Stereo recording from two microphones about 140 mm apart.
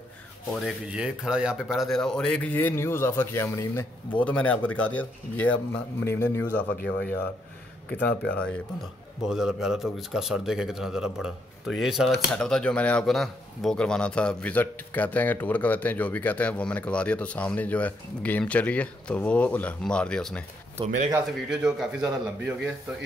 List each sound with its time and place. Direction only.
0.5 s speech: centre (ahead or behind); by 6.6 s 15° left (ahead or behind)
8.0 s speech: 10° left (ahead or behind)
21.5 s speech: 5° right (ahead or behind)